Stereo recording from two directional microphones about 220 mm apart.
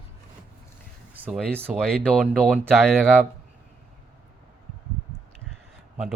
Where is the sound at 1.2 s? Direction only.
10° right (ahead or behind).